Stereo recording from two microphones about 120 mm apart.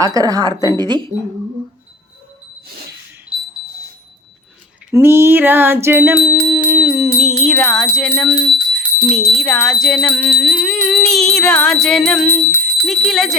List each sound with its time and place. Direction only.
0.0 s a woman's voice: 30° right (ahead or behind)
4.9 s bicycle bell: 20° right (ahead or behind)
7.2 s music: centre (ahead or behind)
8.0 s speech: 10° left (ahead or behind)
9.8 s music: 5° left (ahead or behind)
12.5 s speech: 5° left (ahead or behind)
13.1 s music: centre (ahead or behind)